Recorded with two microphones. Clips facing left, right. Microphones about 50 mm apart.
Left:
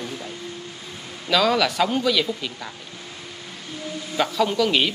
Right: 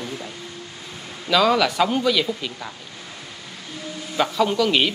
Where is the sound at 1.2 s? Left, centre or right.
Centre.